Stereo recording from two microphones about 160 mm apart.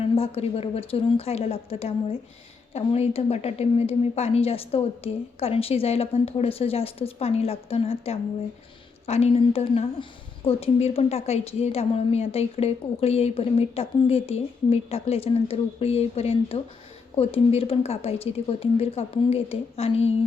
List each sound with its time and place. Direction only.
0.2 s a woman's voice: 40° left (ahead or behind)